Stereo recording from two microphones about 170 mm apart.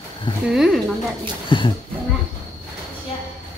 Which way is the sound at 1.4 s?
30° left (ahead or behind).